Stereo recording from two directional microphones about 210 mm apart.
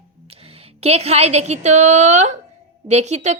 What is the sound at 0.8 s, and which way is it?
A woman's voice, 30° right (ahead or behind).